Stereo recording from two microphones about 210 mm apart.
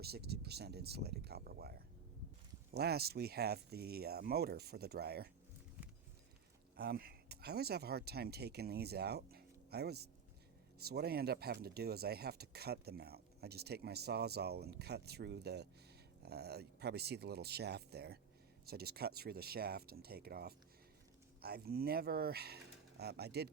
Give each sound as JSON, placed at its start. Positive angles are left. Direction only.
{"t": 0.0, "sound": "speech", "side_deg": -50}
{"t": 6.7, "sound": "speech", "side_deg": -45}